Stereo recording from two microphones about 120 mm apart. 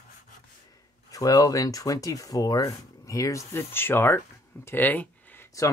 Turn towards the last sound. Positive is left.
turn(degrees=15)  # may be behind; listen again after turning